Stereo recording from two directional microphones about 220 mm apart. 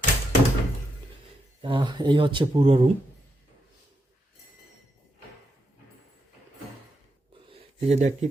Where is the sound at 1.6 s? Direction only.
20° right (ahead or behind).